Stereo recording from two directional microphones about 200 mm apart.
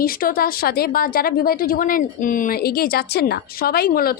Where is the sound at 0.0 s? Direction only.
45° left (ahead or behind).